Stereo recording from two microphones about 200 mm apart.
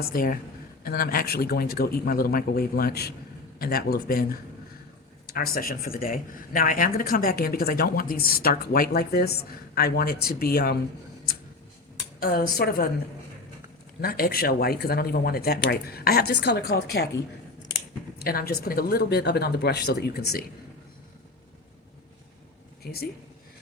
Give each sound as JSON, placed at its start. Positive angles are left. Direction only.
{"t": 0.0, "sound": "speech", "side_deg": 45}
{"t": 5.3, "sound": "speech", "side_deg": 50}
{"t": 12.2, "sound": "speech", "side_deg": 50}
{"t": 14.0, "sound": "speech", "side_deg": 50}
{"t": 18.2, "sound": "speech", "side_deg": 50}
{"t": 22.8, "sound": "speech", "side_deg": 50}